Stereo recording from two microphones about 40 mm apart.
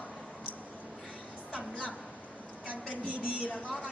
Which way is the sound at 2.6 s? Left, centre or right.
Right.